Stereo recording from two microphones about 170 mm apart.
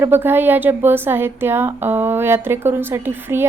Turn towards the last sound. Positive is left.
turn(degrees=-15)  # may be behind; listen again after turning